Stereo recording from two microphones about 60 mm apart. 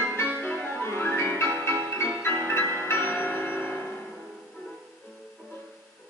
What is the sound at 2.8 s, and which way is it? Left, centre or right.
Bell, left.